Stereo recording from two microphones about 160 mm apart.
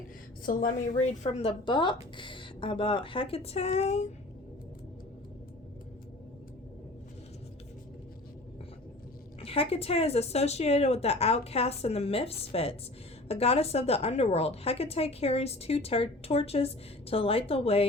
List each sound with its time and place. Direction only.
0.4 s a woman's voice: 60° left (ahead or behind); by 4.1 s 45° left (ahead or behind)
9.4 s a woman's voice: 35° left (ahead or behind)